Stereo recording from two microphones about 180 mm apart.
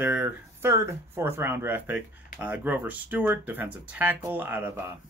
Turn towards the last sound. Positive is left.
turn(degrees=-15)  # may be behind; listen again after turning